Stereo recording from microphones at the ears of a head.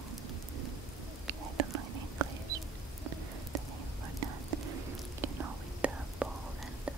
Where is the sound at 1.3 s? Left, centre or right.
Right.